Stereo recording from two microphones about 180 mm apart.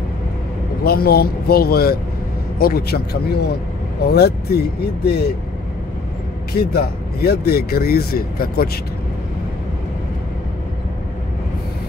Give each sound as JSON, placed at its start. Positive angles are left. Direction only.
{"t": 0.8, "sound": "speech", "side_deg": 60}
{"t": 6.5, "sound": "speech", "side_deg": 60}